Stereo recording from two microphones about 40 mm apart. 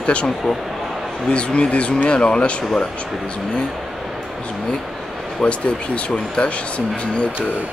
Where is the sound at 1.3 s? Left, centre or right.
Left.